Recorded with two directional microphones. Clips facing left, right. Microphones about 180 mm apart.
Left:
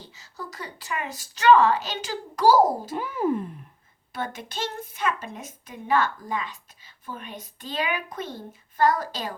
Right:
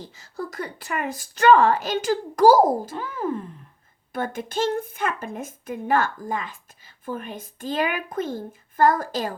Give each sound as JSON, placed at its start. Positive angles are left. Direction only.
{"t": 0.0, "sound": "a woman's voice", "side_deg": -55}
{"t": 2.9, "sound": "speech", "side_deg": 15}
{"t": 4.1, "sound": "a woman's voice", "side_deg": -50}